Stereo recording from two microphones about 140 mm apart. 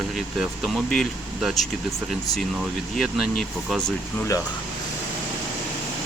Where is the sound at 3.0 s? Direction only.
Centre (ahead or behind).